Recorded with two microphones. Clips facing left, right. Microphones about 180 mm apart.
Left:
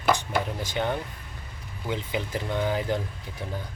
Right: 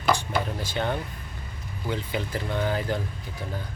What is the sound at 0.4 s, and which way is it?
Speech, 15° left (ahead or behind).